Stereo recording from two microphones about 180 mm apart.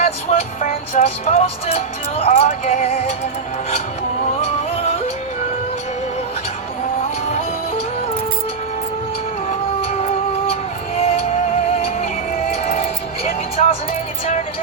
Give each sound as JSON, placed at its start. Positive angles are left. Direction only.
{"t": 0.0, "sound": "music", "side_deg": 35}
{"t": 4.4, "sound": "music", "side_deg": 35}
{"t": 10.4, "sound": "music", "side_deg": 35}
{"t": 12.6, "sound": "music", "side_deg": 35}